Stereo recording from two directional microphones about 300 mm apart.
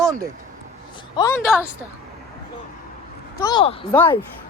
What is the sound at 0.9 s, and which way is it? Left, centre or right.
Speech, centre.